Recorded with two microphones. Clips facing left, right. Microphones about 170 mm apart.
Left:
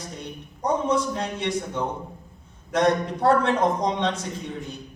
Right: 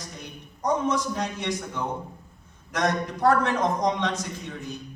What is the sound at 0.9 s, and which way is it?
A man's voice, 30° left (ahead or behind).